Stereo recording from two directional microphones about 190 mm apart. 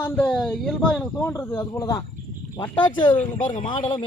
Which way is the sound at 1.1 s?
15° left (ahead or behind).